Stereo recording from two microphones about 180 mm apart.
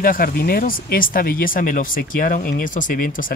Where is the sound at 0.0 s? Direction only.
55° left (ahead or behind).